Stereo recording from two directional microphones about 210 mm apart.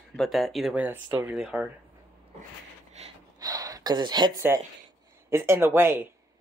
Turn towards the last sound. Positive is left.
turn(degrees=-10)  # may be behind; listen again after turning